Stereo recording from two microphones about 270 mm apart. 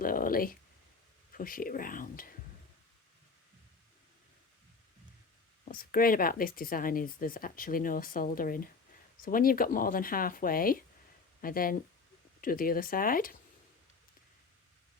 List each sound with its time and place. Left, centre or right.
0.0 s a sound: left
1.3 s speech: left
5.7 s speech: left